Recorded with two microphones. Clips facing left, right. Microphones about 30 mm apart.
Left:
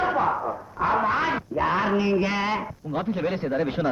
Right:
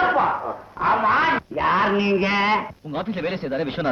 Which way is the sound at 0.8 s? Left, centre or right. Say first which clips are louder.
Right 4 dB; right.